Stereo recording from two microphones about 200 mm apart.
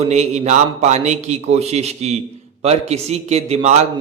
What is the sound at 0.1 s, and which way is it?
A man's voice, 35° right (ahead or behind).